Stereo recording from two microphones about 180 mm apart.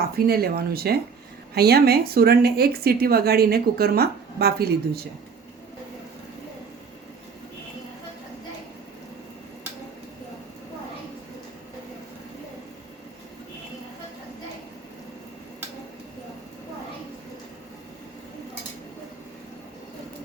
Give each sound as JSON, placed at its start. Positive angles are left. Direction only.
{"t": 0.3, "sound": "a woman's voice", "side_deg": -60}